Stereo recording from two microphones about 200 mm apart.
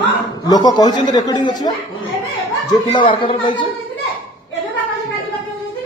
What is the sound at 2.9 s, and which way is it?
Speech, 25° left (ahead or behind).